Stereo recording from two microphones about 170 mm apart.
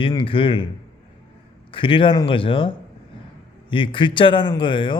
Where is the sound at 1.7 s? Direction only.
30° left (ahead or behind).